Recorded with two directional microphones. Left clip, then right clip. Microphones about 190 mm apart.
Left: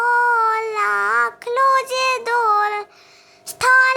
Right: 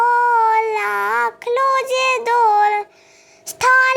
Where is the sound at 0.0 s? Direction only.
Centre (ahead or behind).